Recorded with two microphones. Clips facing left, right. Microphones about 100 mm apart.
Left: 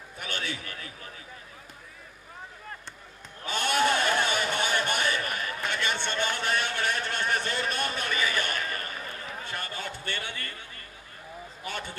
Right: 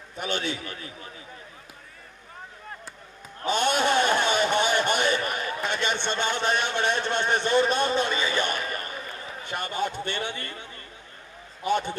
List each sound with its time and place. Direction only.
0.2 s a man's voice: 25° right (ahead or behind)
3.4 s a sound: 20° right (ahead or behind)
9.4 s a man's voice: 20° right (ahead or behind)
11.6 s a man's voice: 20° right (ahead or behind)